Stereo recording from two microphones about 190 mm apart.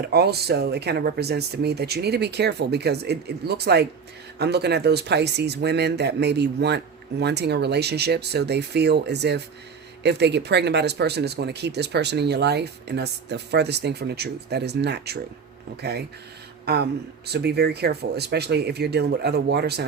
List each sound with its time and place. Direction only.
0.1 s speech: 55° right (ahead or behind)